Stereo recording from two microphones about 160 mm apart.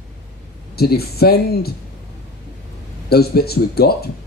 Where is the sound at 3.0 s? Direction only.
80° left.